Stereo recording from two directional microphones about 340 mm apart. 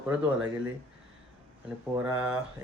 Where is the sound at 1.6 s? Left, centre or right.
Centre.